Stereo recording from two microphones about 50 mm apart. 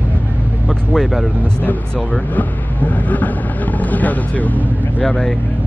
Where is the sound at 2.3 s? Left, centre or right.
Left.